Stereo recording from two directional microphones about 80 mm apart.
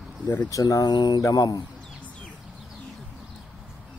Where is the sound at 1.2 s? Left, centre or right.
Left.